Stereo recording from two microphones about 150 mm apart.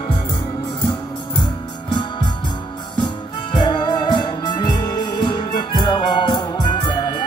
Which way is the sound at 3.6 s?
30° left (ahead or behind).